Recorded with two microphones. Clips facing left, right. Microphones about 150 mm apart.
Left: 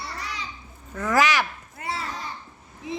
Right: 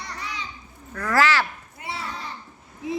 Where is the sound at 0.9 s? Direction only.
20° left (ahead or behind).